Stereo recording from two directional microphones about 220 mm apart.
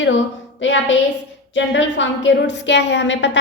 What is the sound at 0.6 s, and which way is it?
A woman's voice, 60° left (ahead or behind).